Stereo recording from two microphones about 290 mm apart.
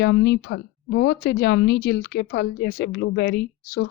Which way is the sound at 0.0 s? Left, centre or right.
Left.